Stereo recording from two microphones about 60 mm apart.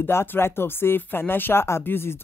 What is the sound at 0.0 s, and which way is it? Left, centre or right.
Speech, left.